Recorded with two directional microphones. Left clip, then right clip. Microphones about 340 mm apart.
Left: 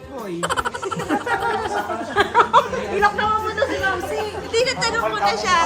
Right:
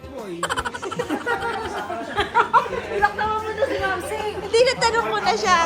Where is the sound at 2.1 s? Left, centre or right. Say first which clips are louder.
Left 3 dB; left.